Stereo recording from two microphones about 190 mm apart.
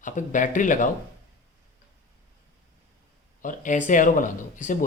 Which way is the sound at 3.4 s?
45° left (ahead or behind).